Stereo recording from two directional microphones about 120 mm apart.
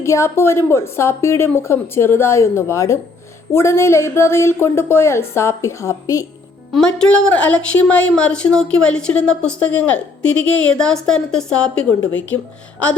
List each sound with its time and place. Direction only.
0.0 s speech: 25° left (ahead or behind)
6.7 s speech: 5° left (ahead or behind)